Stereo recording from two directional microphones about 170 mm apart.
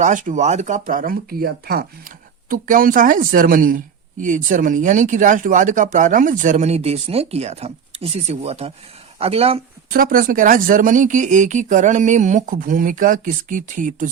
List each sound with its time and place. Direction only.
0.0 s speech: 50° right (ahead or behind)
9.9 s speech: 55° right (ahead or behind)